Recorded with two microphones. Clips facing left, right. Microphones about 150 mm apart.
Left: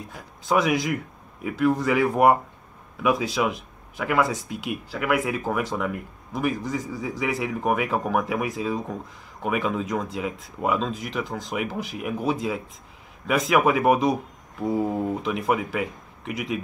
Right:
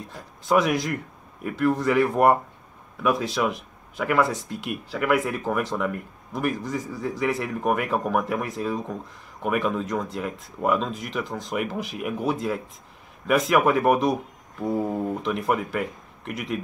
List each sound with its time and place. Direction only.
0.1 s speech: centre (ahead or behind)